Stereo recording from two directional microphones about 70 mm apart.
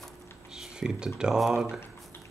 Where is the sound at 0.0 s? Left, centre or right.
Centre.